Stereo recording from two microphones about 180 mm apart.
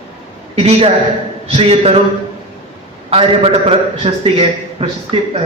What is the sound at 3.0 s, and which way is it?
A man's voice, 35° right (ahead or behind).